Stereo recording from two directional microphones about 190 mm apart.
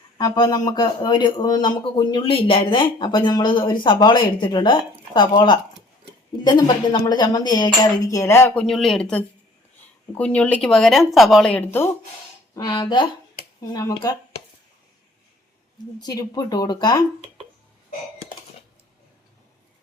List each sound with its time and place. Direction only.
0.2 s speech: 20° left (ahead or behind)
12.5 s speech: 20° left (ahead or behind)
16.0 s speech: 20° left (ahead or behind)